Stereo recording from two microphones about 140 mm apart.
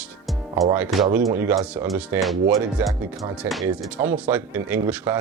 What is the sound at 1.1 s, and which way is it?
Speech, 20° right (ahead or behind).